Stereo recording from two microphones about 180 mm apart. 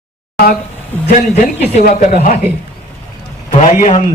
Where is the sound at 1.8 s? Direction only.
45° left (ahead or behind).